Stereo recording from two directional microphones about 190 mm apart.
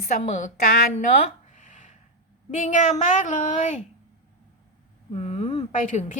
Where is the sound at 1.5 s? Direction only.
40° left (ahead or behind).